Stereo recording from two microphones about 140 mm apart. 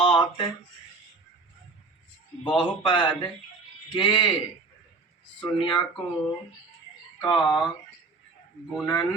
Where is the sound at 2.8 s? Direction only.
35° left (ahead or behind).